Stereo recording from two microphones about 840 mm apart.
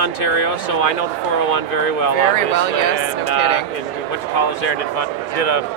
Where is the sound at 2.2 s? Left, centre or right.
Left.